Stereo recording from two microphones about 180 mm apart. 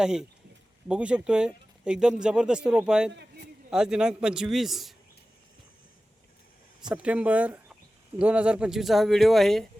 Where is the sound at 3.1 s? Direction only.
65° right (ahead or behind).